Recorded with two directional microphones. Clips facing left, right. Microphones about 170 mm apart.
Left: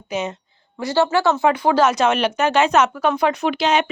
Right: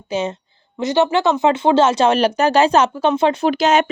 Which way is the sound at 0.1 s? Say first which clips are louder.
Right 3 dB; 30° right (ahead or behind).